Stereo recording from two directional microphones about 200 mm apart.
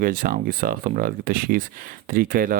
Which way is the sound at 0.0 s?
45° right (ahead or behind).